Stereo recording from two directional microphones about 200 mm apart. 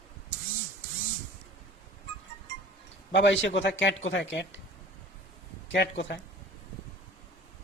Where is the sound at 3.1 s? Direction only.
60° left (ahead or behind).